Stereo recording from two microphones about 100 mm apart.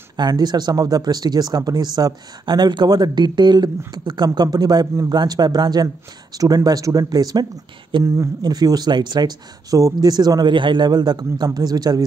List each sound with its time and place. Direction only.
0.2 s speech: 45° right (ahead or behind)
7.9 s speech: 55° right (ahead or behind)
8.4 s speech: 45° right (ahead or behind)